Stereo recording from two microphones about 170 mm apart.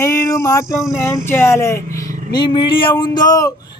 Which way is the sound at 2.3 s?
25° left (ahead or behind).